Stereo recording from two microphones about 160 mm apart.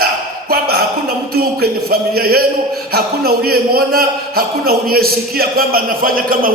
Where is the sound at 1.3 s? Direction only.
75° right (ahead or behind).